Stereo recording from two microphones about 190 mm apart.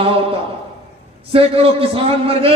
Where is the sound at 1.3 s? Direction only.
30° right (ahead or behind).